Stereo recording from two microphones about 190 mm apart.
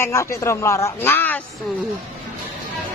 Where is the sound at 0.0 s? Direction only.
15° left (ahead or behind).